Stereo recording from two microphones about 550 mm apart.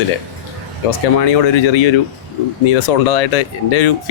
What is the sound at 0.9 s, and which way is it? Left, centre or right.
Speech, left.